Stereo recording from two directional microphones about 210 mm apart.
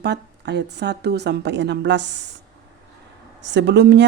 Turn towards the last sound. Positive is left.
turn(degrees=-55)  # may be behind; listen again after turning